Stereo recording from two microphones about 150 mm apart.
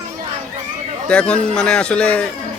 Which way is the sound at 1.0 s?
5° left (ahead or behind).